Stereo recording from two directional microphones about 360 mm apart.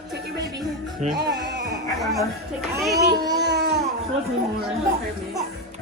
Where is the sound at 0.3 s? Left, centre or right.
Centre.